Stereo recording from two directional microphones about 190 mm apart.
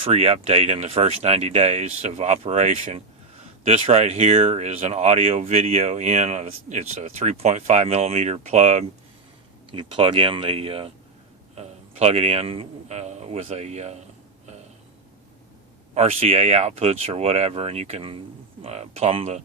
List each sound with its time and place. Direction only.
0.0 s speech: 30° right (ahead or behind)
9.7 s a man's voice: 25° right (ahead or behind)
16.0 s speech: 35° right (ahead or behind)